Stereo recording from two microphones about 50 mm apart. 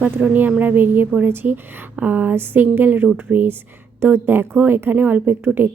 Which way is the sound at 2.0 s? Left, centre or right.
Right.